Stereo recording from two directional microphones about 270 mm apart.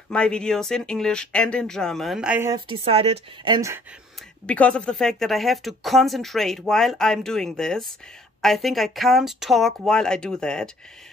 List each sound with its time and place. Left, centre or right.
0.1 s speech: centre
2.7 s a woman's voice: right
4.5 s speech: centre